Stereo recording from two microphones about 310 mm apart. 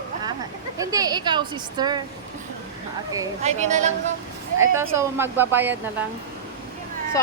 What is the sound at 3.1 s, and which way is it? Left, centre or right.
Speech, centre.